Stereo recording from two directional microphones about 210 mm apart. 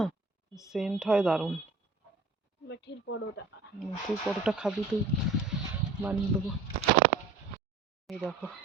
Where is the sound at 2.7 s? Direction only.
55° left (ahead or behind).